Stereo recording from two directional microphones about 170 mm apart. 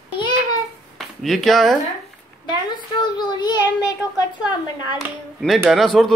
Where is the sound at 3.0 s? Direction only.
25° left (ahead or behind).